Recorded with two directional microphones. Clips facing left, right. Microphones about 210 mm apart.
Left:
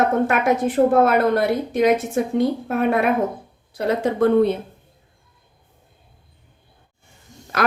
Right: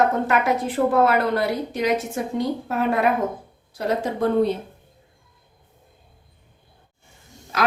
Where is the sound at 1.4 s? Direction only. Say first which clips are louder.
Left 5 dB; 55° left (ahead or behind).